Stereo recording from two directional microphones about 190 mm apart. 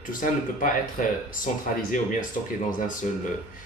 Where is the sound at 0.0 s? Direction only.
45° left (ahead or behind).